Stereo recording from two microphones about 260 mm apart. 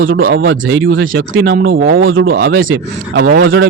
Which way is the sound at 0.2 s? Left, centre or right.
Right.